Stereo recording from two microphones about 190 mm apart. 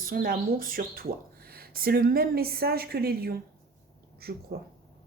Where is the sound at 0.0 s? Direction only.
50° right (ahead or behind).